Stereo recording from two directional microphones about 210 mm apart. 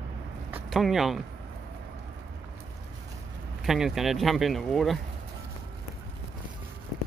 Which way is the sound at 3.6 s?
Centre (ahead or behind).